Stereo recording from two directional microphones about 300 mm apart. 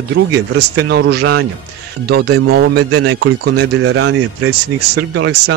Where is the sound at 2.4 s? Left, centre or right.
Right.